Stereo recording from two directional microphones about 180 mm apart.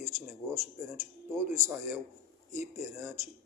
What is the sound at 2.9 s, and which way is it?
Speech, 10° right (ahead or behind).